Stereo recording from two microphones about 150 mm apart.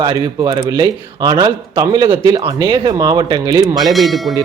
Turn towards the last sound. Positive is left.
turn(degrees=0)  # may be behind; listen again after turning